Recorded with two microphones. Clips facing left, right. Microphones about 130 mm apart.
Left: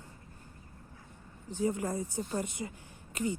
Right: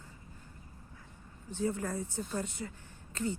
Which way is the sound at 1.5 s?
15° left (ahead or behind).